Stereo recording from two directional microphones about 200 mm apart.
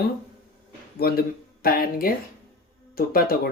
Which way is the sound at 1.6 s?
45° left (ahead or behind).